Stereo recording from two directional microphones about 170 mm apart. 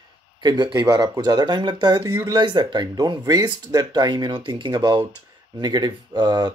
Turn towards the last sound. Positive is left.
turn(degrees=-25)  # may be behind; listen again after turning